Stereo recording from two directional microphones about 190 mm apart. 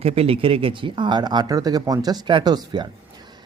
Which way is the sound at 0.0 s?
30° right (ahead or behind).